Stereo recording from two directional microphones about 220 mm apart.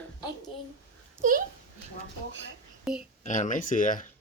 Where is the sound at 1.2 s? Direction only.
40° right (ahead or behind).